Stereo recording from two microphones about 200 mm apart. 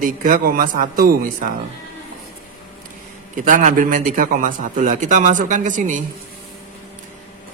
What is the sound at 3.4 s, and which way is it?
A man's voice, 40° right (ahead or behind).